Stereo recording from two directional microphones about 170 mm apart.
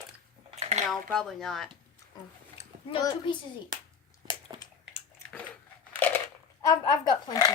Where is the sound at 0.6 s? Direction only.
40° right (ahead or behind).